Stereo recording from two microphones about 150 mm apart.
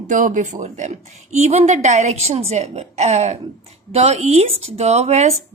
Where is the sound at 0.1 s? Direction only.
55° right (ahead or behind).